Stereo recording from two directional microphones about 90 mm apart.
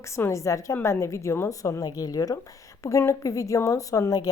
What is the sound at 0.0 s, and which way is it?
A woman's voice, 30° left (ahead or behind).